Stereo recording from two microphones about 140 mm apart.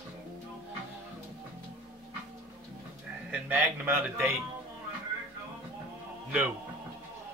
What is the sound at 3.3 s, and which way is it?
Speech, 15° right (ahead or behind).